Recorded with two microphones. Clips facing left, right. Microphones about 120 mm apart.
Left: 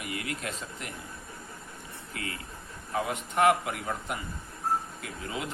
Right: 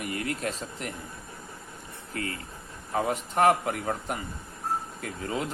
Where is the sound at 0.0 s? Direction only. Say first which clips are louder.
Right 4 dB; 40° right (ahead or behind).